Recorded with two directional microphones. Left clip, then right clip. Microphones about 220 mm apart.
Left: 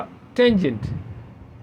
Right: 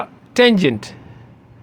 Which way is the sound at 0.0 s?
35° right (ahead or behind).